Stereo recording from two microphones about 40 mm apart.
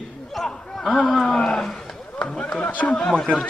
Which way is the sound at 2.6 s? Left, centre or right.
Left.